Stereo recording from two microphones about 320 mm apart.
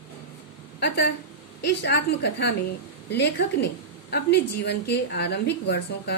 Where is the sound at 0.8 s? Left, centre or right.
Left.